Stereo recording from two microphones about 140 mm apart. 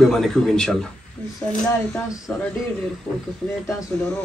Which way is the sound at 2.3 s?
10° left (ahead or behind).